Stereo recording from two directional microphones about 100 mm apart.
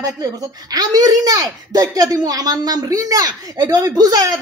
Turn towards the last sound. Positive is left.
turn(degrees=-40)  # may be behind; listen again after turning